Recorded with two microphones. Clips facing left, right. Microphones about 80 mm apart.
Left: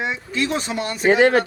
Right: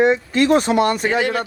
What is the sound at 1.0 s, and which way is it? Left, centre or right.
Speech, left.